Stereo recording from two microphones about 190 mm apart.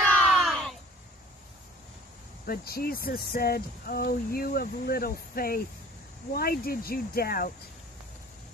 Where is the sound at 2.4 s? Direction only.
50° left (ahead or behind).